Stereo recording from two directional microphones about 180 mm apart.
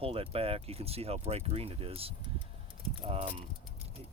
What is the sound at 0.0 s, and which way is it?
Speech, 30° right (ahead or behind).